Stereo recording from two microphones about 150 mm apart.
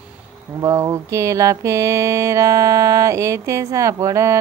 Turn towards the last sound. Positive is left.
turn(degrees=-20)  # may be behind; listen again after turning